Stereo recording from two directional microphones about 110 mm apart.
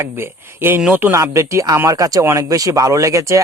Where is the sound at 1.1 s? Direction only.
25° right (ahead or behind).